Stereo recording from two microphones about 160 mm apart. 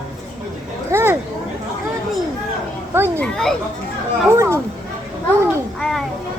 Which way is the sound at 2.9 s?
15° right (ahead or behind).